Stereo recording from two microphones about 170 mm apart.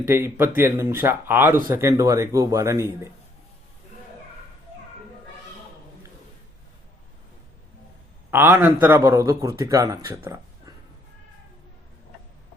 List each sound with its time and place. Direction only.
0.0 s a man's voice: 15° right (ahead or behind)
8.3 s a man's voice: 10° right (ahead or behind)